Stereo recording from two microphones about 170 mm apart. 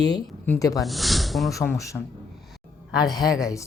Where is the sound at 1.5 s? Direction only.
20° left (ahead or behind).